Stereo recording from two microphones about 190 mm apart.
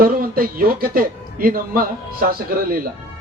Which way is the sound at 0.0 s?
50° right (ahead or behind).